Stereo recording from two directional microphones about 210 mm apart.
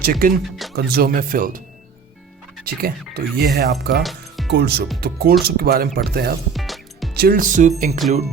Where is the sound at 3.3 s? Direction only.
50° right (ahead or behind).